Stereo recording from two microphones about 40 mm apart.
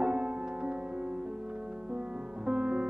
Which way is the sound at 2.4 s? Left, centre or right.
Right.